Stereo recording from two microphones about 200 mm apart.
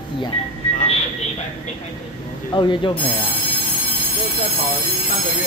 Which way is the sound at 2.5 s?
25° left (ahead or behind).